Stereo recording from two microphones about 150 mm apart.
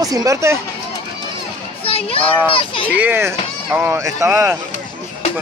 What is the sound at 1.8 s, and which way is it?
A child's voice, 40° left (ahead or behind).